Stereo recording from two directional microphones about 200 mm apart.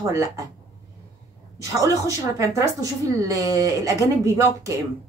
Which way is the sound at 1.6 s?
15° right (ahead or behind).